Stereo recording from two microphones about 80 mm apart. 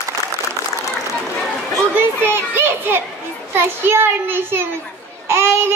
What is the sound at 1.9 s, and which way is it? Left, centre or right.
A child's voice, right.